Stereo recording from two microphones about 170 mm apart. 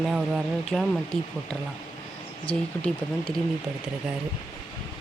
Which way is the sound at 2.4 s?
5° left (ahead or behind).